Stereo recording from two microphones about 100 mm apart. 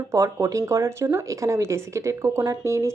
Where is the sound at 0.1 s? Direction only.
30° right (ahead or behind).